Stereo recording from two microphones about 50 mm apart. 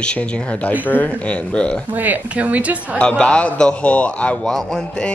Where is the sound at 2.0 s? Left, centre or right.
Right.